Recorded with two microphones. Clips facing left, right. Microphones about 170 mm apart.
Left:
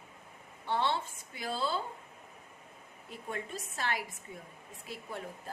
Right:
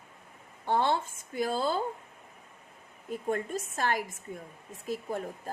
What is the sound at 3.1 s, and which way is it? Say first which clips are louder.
A woman's voice: right 9 dB; 45° right (ahead or behind).